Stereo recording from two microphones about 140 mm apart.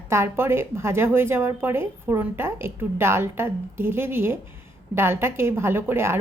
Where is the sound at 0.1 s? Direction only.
20° right (ahead or behind).